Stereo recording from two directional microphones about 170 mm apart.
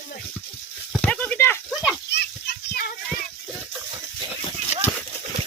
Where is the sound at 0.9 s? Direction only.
10° left (ahead or behind).